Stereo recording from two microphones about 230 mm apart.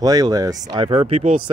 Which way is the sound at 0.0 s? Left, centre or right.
Centre.